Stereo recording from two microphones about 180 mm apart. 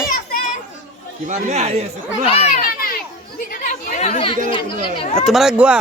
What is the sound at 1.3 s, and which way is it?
Speech, 40° right (ahead or behind).